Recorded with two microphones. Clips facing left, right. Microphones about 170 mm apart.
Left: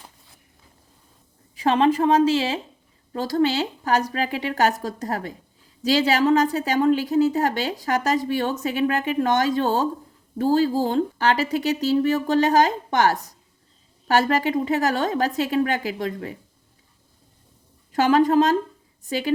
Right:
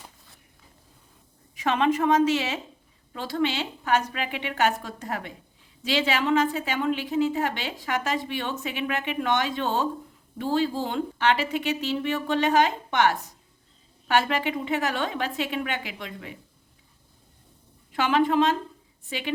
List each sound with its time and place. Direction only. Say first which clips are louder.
1.5 s a woman's voice: left 5 dB; 35° left (ahead or behind)
17.9 s a woman's voice: left 5 dB; 40° left (ahead or behind)